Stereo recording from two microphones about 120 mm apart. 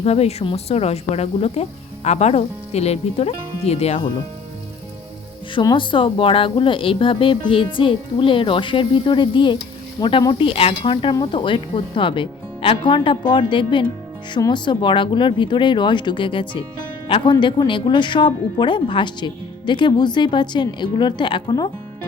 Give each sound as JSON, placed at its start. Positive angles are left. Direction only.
{"t": 0.0, "sound": "speech", "side_deg": 60}
{"t": 5.7, "sound": "speech", "side_deg": 45}